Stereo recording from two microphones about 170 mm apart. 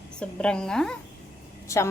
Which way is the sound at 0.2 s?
5° left (ahead or behind).